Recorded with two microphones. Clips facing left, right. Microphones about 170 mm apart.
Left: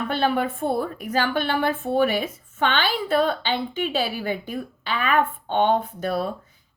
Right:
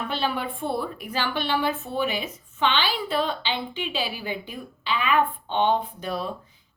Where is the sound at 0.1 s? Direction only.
50° left (ahead or behind).